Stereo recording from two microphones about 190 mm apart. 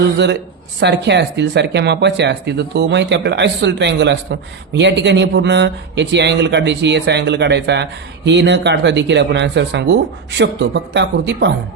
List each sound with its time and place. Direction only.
0.8 s speech: 65° right (ahead or behind)